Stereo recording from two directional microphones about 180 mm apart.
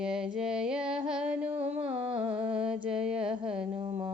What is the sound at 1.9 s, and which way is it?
Humming, 30° right (ahead or behind).